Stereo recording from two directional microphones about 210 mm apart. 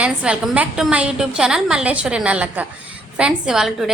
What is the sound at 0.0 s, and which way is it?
A woman's voice, 5° right (ahead or behind).